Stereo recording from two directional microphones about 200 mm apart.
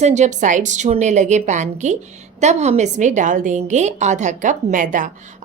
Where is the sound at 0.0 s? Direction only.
35° right (ahead or behind).